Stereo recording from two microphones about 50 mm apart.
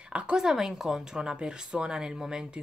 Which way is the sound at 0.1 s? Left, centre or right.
Right.